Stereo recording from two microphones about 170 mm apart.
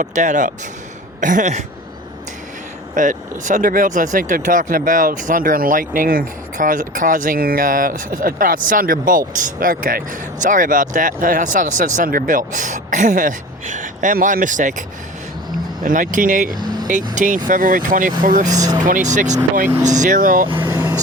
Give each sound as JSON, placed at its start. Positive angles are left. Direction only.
{"t": 0.0, "sound": "speech", "side_deg": -45}
{"t": 2.9, "sound": "speech", "side_deg": -50}
{"t": 18.4, "sound": "speech", "side_deg": -20}
{"t": 19.1, "sound": "speech", "side_deg": -45}
{"t": 20.5, "sound": "vehicle", "side_deg": -20}